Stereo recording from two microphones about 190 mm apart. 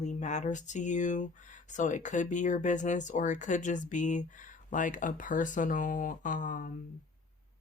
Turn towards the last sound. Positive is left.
turn(degrees=45)  # may be behind; listen again after turning